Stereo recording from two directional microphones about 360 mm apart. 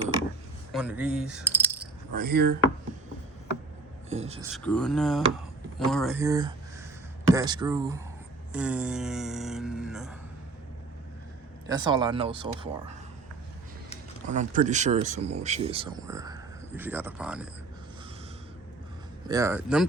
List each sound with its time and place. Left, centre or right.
0.0 s a sound: centre
2.1 s speech: right
4.1 s speech: centre
4.5 s speech: centre
11.6 s speech: centre
14.3 s speech: centre
19.3 s speech: centre